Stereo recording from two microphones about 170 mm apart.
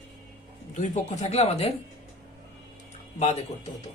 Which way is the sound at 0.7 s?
45° left (ahead or behind).